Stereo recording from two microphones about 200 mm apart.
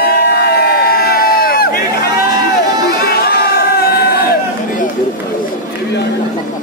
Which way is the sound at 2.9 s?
50° left (ahead or behind).